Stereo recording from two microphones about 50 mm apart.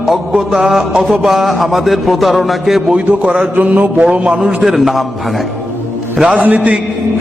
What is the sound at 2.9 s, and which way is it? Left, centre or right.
Speech, right.